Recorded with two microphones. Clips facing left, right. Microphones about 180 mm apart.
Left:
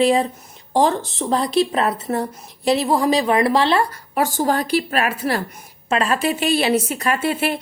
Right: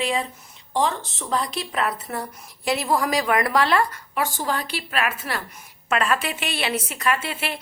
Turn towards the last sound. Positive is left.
turn(degrees=40)  # may be behind; listen again after turning